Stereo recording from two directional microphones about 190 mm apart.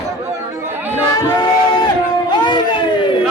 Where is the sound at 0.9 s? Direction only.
20° left (ahead or behind).